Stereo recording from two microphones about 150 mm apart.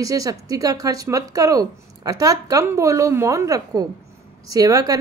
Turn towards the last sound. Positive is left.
turn(degrees=-25)  # may be behind; listen again after turning